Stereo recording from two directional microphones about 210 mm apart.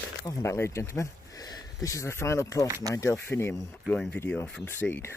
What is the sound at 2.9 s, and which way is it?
Speech, 15° left (ahead or behind).